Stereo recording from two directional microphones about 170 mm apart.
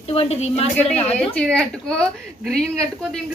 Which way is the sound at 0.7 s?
10° left (ahead or behind).